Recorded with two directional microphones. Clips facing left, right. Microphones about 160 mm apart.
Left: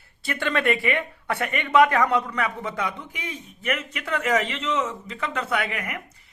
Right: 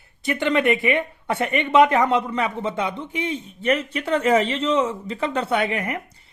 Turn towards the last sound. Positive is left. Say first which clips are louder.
# right 5 dB
turn(degrees=-30)  # may be behind; listen again after turning